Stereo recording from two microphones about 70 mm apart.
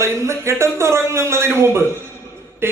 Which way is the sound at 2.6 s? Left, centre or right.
Right.